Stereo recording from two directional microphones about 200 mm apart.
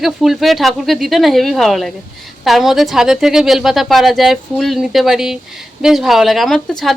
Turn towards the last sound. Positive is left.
turn(degrees=5)  # may be behind; listen again after turning